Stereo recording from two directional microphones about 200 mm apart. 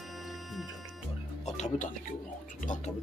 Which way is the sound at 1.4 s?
35° left (ahead or behind).